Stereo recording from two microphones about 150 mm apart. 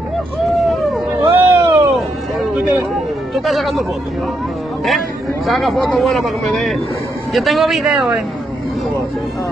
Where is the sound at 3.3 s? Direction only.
Centre (ahead or behind).